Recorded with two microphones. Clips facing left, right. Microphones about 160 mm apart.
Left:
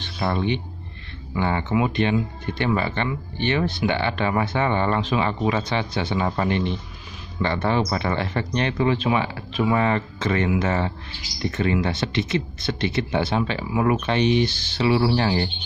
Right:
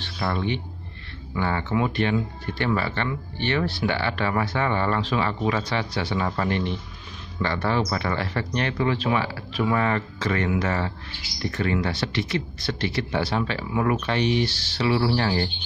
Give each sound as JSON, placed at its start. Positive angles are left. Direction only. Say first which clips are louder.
{"t": 0.0, "sound": "speech", "louder": "left 3 dB", "side_deg": 20}